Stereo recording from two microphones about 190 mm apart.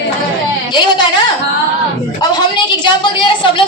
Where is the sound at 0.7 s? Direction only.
25° left (ahead or behind).